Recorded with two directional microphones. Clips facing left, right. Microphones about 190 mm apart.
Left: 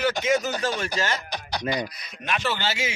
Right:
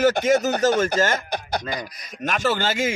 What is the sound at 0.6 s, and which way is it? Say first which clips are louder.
A man's voice: right 8 dB; 45° right (ahead or behind).